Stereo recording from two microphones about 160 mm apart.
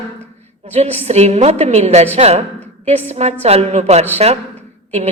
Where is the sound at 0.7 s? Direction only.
40° right (ahead or behind).